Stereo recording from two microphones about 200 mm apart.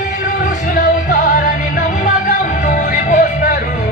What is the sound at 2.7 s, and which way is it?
Music, 45° left (ahead or behind).